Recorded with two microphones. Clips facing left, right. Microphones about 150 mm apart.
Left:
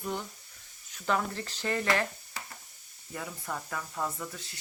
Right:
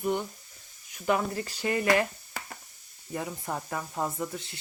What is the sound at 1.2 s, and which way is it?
Speech, 10° right (ahead or behind).